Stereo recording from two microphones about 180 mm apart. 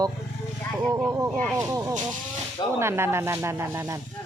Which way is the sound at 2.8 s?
15° right (ahead or behind).